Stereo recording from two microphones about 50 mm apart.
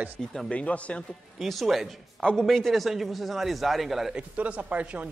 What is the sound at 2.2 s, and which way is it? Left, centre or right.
Speech, centre.